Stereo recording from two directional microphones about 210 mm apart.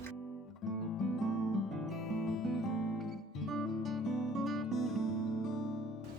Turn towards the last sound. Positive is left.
turn(degrees=0)  # may be behind; listen again after turning